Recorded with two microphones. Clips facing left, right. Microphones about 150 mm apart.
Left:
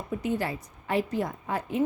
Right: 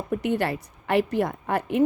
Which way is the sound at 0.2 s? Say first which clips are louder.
Right 4 dB; 70° right (ahead or behind).